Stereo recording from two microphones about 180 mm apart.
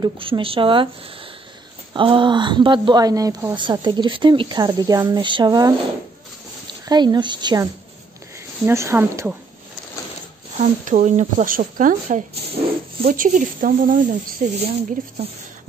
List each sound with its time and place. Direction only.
0.0 s speech: 30° right (ahead or behind)
2.0 s speech: 30° right (ahead or behind)
6.9 s speech: 25° right (ahead or behind)
10.6 s speech: 45° right (ahead or behind)